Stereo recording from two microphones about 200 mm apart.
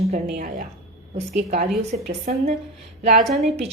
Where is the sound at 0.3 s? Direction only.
40° right (ahead or behind).